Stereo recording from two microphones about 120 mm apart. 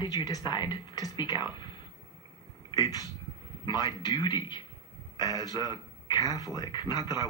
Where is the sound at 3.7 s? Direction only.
35° left (ahead or behind).